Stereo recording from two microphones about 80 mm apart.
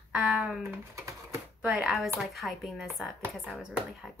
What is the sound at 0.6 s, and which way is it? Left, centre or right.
Speech, right.